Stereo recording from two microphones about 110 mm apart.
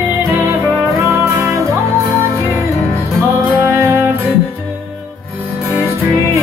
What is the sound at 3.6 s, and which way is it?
Music, 25° right (ahead or behind).